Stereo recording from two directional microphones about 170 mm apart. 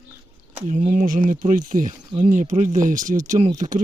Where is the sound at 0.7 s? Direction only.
45° right (ahead or behind).